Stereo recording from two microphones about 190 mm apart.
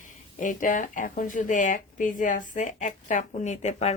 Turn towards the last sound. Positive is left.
turn(degrees=35)  # may be behind; listen again after turning